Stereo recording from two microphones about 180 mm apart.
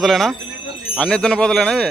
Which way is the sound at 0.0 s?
Centre (ahead or behind).